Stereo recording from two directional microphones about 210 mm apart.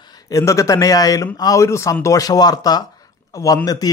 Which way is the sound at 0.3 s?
15° left (ahead or behind).